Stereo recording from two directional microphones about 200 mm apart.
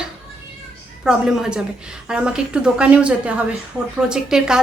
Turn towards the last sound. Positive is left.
turn(degrees=-5)  # may be behind; listen again after turning